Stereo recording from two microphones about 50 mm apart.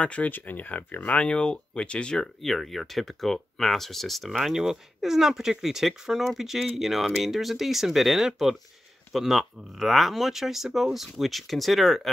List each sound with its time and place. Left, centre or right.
0.0 s speech: left
0.3 s speech: left
1.1 s speech: left
2.4 s speech: centre